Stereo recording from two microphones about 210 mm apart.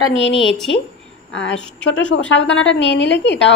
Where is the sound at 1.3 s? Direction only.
60° left (ahead or behind).